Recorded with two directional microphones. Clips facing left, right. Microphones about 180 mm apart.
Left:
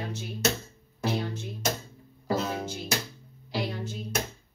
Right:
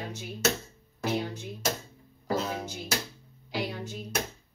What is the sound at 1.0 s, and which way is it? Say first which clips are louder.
Music: even; 15° right (ahead or behind).